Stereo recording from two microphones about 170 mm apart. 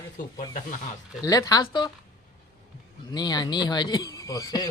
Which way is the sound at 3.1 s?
25° left (ahead or behind).